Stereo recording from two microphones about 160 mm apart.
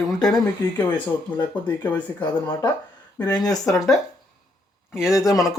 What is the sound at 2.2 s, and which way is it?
Speech, 25° left (ahead or behind).